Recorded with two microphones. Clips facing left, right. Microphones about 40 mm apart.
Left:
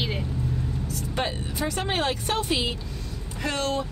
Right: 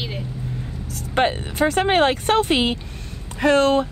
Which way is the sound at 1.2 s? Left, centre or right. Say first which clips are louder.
Right 10 dB; right.